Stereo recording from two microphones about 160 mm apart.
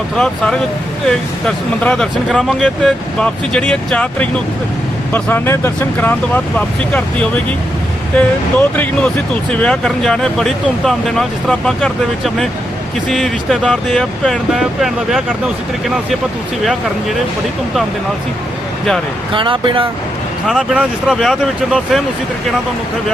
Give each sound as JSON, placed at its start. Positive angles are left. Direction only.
{"t": 1.0, "sound": "speech", "side_deg": 5}
{"t": 19.3, "sound": "speech", "side_deg": -30}
{"t": 20.5, "sound": "speech", "side_deg": -5}